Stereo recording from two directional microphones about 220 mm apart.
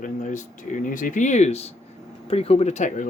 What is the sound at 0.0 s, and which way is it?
Speech, 35° left (ahead or behind).